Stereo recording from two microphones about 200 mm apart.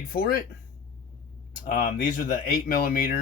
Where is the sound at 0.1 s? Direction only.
50° left (ahead or behind).